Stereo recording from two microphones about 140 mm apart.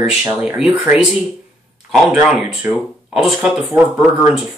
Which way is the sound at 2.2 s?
5° right (ahead or behind).